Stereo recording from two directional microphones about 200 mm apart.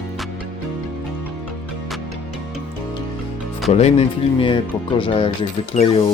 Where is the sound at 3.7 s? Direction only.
30° left (ahead or behind).